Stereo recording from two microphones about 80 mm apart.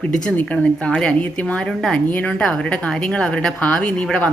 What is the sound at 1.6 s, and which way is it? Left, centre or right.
A woman's voice, centre.